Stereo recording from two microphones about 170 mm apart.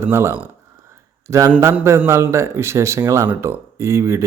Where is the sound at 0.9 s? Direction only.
15° right (ahead or behind).